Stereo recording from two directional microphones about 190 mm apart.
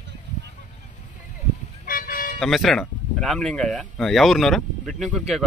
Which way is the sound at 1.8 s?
50° left (ahead or behind).